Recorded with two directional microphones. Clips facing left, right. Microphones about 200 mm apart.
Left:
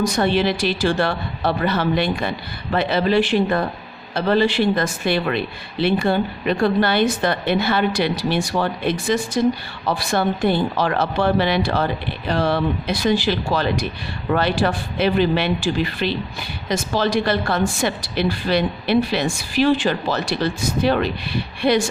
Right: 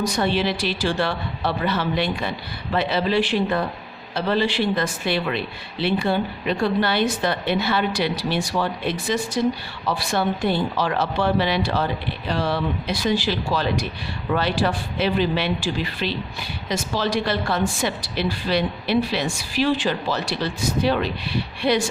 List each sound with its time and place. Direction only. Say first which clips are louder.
0.0 s a woman's voice: left 3 dB; 50° left (ahead or behind)